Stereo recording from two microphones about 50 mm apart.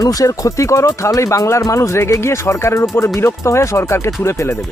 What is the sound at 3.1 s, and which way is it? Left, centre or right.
Speech, left.